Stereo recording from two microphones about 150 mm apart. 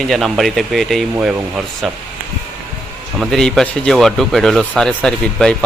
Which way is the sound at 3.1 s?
5° left (ahead or behind).